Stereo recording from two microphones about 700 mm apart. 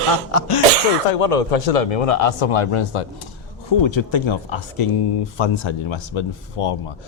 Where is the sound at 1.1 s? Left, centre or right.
Left.